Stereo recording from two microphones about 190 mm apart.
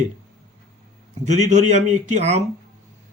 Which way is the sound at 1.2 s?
40° right (ahead or behind).